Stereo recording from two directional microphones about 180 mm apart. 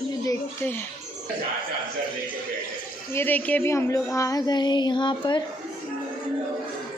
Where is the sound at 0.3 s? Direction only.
10° left (ahead or behind).